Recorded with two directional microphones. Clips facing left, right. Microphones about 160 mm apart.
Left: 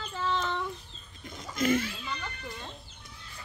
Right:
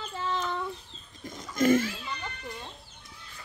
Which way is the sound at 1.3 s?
45° right (ahead or behind).